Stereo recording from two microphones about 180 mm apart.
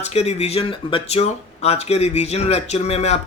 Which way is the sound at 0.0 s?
35° left (ahead or behind).